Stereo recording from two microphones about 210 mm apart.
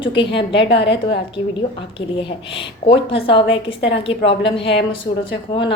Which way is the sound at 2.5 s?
25° left (ahead or behind).